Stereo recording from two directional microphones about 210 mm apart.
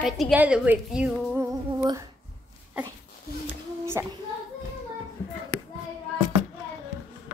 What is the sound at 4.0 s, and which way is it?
Speech, 15° right (ahead or behind).